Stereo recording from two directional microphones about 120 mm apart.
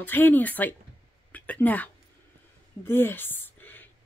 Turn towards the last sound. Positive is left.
turn(degrees=15)  # may be behind; listen again after turning